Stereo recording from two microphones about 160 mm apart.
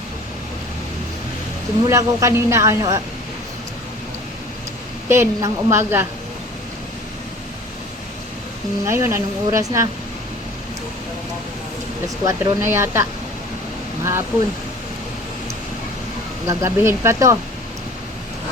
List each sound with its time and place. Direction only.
1.9 s speech: 20° right (ahead or behind)
5.0 s speech: 15° right (ahead or behind)
8.9 s speech: 15° right (ahead or behind)
12.0 s speech: 20° right (ahead or behind)
16.5 s speech: 20° right (ahead or behind)